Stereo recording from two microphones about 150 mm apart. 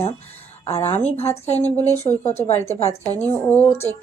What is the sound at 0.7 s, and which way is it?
A woman's voice, 40° left (ahead or behind).